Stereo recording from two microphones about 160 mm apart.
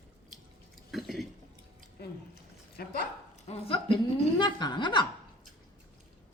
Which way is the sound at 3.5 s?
35° left (ahead or behind).